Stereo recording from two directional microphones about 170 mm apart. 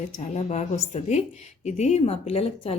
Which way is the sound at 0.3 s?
40° left (ahead or behind).